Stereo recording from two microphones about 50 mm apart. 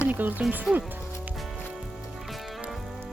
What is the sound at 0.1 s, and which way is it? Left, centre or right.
Speech, right.